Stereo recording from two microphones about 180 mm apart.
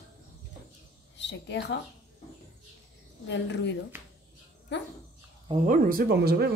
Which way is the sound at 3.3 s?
75° left (ahead or behind).